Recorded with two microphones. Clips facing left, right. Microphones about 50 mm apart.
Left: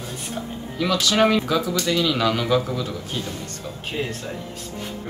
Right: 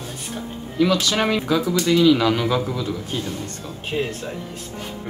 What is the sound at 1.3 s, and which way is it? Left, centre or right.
Speech, centre.